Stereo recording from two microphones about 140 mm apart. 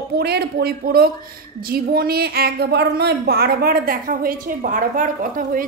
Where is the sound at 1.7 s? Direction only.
90° right.